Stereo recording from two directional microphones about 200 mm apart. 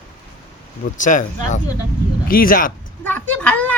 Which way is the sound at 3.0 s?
10° left (ahead or behind).